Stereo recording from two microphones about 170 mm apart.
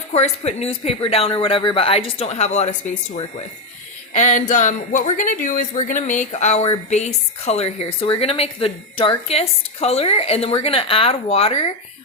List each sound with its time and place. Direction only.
0.1 s speech: 40° left (ahead or behind)
4.1 s speech: 45° left (ahead or behind)